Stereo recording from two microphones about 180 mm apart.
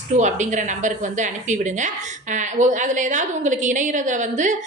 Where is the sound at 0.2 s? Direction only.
40° right (ahead or behind).